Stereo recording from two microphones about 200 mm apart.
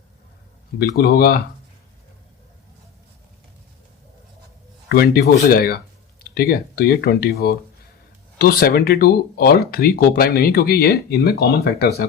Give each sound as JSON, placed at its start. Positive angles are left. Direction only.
{"t": 0.8, "sound": "speech", "side_deg": 50}
{"t": 4.9, "sound": "speech", "side_deg": 50}